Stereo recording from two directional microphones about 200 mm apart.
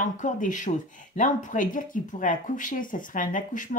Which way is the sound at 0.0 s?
40° left (ahead or behind).